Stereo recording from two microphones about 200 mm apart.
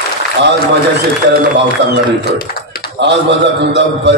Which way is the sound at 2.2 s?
50° left (ahead or behind).